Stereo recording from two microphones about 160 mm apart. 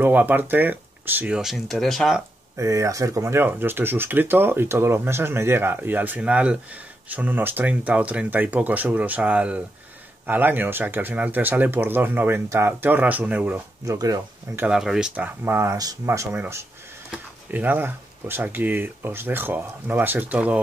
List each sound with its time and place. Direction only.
0.0 s speech: 10° right (ahead or behind)
2.5 s speech: 20° right (ahead or behind)
13.9 s speech: 20° right (ahead or behind)